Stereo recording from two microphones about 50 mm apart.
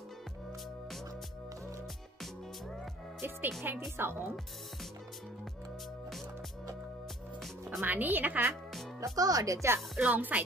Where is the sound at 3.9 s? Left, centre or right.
Right.